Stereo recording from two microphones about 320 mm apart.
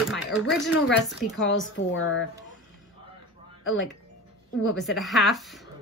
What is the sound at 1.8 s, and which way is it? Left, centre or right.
Speech, left.